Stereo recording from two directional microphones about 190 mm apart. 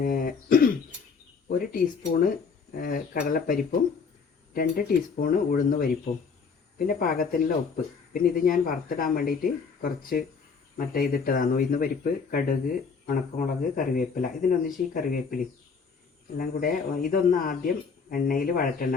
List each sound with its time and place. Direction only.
0.0 s speech: 45° left (ahead or behind)